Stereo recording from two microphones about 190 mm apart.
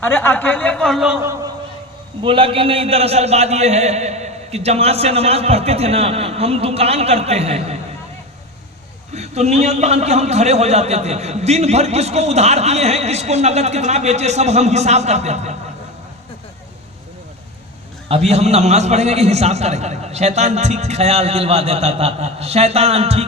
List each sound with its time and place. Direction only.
0.0 s a man's voice: 10° left (ahead or behind)
2.2 s a man's voice: 25° right (ahead or behind)
9.1 s a man's voice: 35° right (ahead or behind)
18.1 s a man's voice: 35° right (ahead or behind)